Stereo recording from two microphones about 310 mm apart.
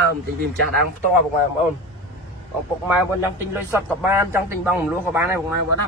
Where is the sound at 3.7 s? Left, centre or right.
Centre.